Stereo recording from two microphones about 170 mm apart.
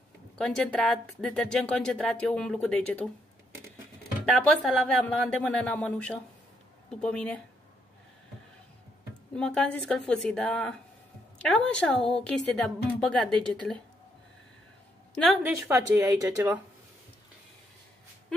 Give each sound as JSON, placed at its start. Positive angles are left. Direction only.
{"t": 0.4, "sound": "speech", "side_deg": 5}
{"t": 4.4, "sound": "speech", "side_deg": 5}
{"t": 9.3, "sound": "speech", "side_deg": 5}
{"t": 15.7, "sound": "speech", "side_deg": -20}